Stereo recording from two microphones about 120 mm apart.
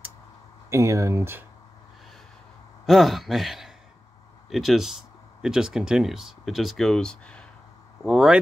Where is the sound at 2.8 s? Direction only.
Centre (ahead or behind).